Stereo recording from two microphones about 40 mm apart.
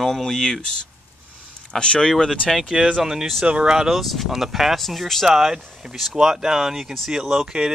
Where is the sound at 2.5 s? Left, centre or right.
Centre.